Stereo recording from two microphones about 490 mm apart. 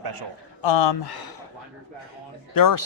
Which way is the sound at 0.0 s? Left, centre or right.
Right.